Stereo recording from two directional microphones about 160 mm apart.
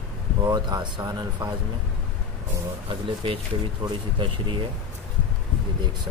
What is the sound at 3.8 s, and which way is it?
Speech, 30° right (ahead or behind).